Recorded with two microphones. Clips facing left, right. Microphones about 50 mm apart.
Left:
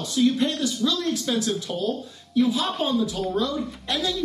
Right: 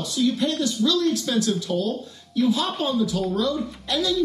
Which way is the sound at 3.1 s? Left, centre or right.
Left.